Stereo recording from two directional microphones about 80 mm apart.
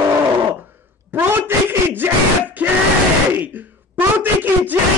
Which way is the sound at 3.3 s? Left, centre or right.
Right.